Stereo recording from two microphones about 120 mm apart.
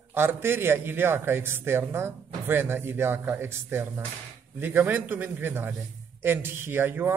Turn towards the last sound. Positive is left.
turn(degrees=-15)  # may be behind; listen again after turning